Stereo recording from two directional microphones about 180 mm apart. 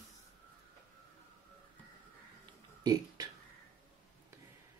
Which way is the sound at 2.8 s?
25° right (ahead or behind).